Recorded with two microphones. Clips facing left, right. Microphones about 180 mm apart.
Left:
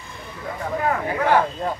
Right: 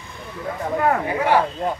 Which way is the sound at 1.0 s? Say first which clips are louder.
Even; 10° right (ahead or behind).